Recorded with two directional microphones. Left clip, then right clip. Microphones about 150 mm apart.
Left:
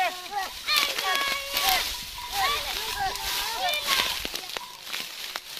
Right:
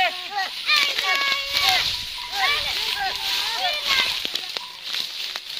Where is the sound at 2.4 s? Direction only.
5° right (ahead or behind).